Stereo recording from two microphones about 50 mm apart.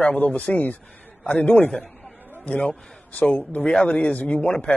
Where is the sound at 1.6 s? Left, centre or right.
Centre.